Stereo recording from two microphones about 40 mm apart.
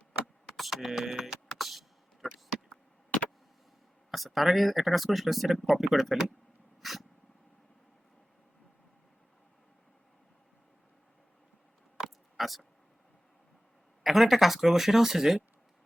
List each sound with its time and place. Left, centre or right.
0.7 s vehicle: centre
4.1 s speech: centre
6.8 s dog: centre
11.9 s a sound: centre
14.0 s speech: centre